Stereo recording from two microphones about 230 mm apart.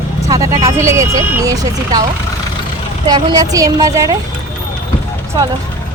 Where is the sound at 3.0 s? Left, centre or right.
Centre.